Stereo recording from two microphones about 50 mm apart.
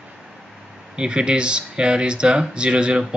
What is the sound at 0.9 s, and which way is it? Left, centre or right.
Speech, centre.